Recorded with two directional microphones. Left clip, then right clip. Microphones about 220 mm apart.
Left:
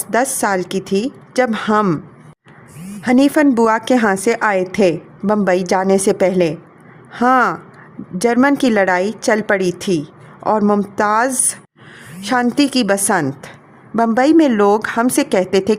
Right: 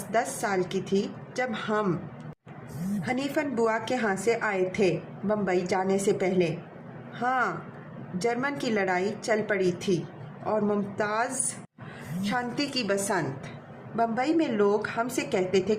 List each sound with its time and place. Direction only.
0.1 s a woman's voice: 50° left (ahead or behind)
3.0 s a woman's voice: 50° left (ahead or behind)